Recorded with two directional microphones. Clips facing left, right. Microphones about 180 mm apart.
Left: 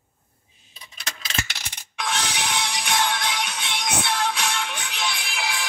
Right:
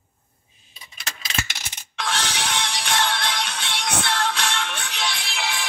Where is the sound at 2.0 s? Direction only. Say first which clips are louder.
Even; 10° left (ahead or behind).